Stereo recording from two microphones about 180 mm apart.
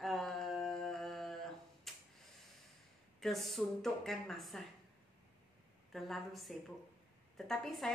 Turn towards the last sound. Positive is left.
turn(degrees=0)  # may be behind; listen again after turning